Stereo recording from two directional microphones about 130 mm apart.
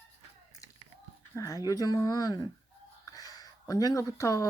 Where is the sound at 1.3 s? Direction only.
25° left (ahead or behind).